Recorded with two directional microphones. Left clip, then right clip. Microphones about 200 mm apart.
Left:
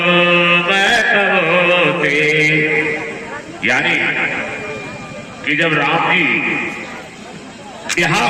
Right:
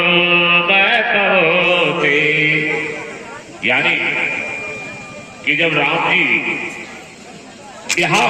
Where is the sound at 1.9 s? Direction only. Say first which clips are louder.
Right 1 dB; 50° left (ahead or behind).